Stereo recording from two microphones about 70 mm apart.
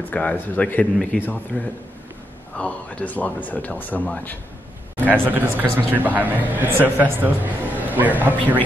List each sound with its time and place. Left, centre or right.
0.1 s speech: left
5.2 s a man's voice: right